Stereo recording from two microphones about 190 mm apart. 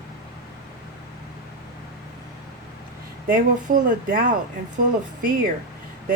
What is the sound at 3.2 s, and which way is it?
Speech, 45° right (ahead or behind).